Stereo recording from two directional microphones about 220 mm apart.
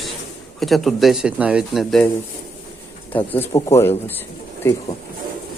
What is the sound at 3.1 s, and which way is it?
Speech, 10° left (ahead or behind).